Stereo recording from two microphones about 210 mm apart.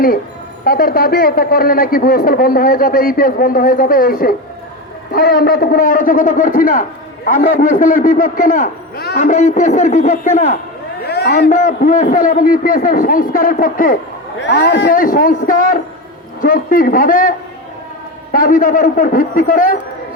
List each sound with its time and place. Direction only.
0.6 s a man's voice: 45° left (ahead or behind)
11.0 s a sound: 50° left (ahead or behind)
11.3 s a man's voice: 35° left (ahead or behind)